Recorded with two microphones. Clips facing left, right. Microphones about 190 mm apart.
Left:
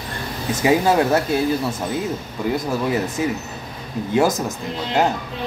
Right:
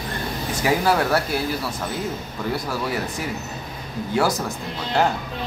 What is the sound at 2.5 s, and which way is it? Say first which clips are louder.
Speech: left 5 dB; 20° left (ahead or behind).